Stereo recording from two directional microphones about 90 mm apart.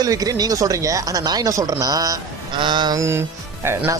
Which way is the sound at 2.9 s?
30° right (ahead or behind).